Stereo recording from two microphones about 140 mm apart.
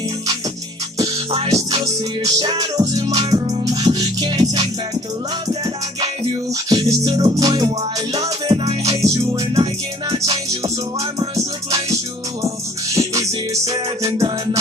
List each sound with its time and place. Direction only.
1.3 s music: 40° right (ahead or behind)
2.2 s music: 30° right (ahead or behind)
6.7 s music: 30° right (ahead or behind)
8.1 s music: 45° right (ahead or behind)
9.0 s music: 30° right (ahead or behind)
13.5 s music: 25° right (ahead or behind)